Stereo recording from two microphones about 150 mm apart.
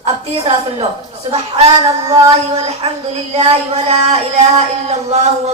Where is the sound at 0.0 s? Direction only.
45° right (ahead or behind).